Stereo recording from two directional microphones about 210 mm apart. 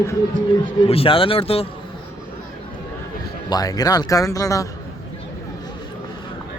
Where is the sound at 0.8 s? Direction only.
25° left (ahead or behind).